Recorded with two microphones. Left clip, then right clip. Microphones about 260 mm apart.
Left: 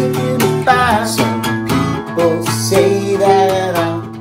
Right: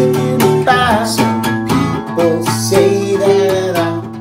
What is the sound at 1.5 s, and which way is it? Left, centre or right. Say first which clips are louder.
Music: right 1 dB; centre.